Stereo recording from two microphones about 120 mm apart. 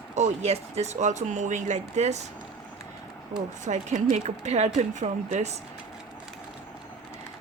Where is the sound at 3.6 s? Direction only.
85° right.